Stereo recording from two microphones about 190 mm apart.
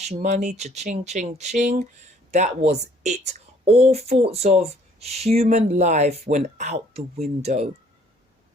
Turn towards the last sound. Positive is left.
turn(degrees=-35)  # may be behind; listen again after turning